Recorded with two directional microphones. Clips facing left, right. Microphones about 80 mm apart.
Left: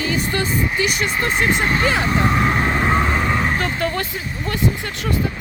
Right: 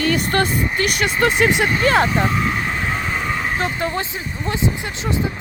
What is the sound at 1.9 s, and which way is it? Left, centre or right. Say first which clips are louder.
Speech: right 7 dB; right.